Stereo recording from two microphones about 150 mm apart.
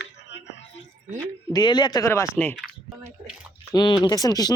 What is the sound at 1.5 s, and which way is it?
Speech, 30° left (ahead or behind).